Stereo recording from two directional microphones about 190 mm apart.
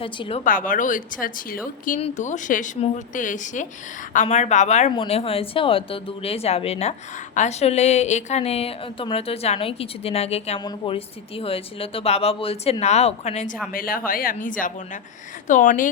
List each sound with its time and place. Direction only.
0.0 s a woman's voice: 30° left (ahead or behind)
0.4 s a woman's voice: 45° left (ahead or behind)
2.0 s a woman's voice: 35° left (ahead or behind)
13.7 s a woman's voice: 50° left (ahead or behind)